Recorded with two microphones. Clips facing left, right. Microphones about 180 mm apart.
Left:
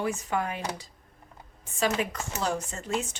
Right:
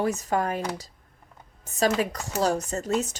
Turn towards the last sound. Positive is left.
turn(degrees=-40)  # may be behind; listen again after turning